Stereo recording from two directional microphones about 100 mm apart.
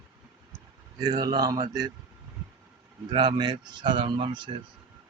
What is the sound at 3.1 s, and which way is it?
Speech, 50° right (ahead or behind).